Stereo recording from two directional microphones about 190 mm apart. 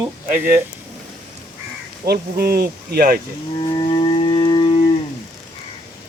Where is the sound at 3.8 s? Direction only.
25° left (ahead or behind).